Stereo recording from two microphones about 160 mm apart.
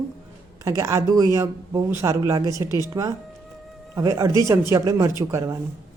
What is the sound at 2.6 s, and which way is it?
Speech, 20° left (ahead or behind).